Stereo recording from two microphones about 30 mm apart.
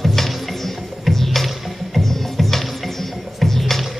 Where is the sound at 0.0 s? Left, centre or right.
Centre.